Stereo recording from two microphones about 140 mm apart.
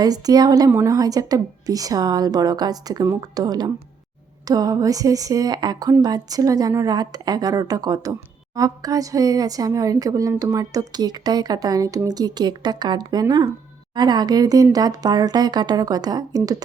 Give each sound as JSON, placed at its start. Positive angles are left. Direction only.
{"t": 0.0, "sound": "a woman's voice", "side_deg": -30}